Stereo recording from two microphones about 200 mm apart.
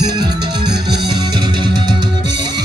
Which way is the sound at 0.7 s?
55° right (ahead or behind).